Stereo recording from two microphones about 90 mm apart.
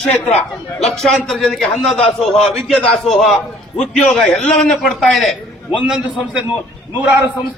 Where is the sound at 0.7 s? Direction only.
5° left (ahead or behind).